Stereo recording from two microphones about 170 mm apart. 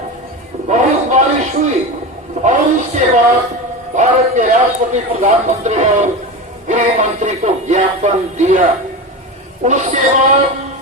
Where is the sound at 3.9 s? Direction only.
45° right (ahead or behind).